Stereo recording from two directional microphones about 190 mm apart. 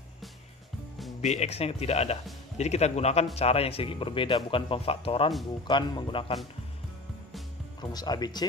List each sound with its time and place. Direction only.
1.2 s speech: 35° left (ahead or behind)
7.9 s speech: 20° left (ahead or behind)